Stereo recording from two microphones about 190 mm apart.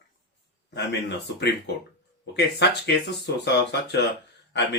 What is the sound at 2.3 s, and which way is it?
Speech, 65° left (ahead or behind).